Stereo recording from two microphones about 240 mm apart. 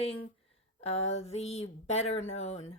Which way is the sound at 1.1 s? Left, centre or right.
Left.